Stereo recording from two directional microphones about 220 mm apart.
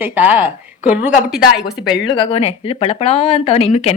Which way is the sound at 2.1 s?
25° left (ahead or behind).